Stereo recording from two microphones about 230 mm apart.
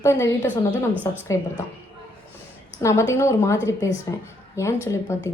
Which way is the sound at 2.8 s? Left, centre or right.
Centre.